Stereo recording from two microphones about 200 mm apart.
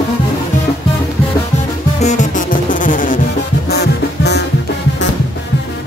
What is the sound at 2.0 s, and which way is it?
Music, 40° left (ahead or behind).